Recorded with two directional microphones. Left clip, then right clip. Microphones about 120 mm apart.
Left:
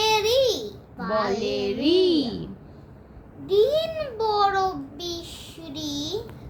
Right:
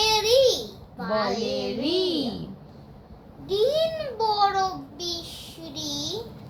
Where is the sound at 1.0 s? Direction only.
10° right (ahead or behind).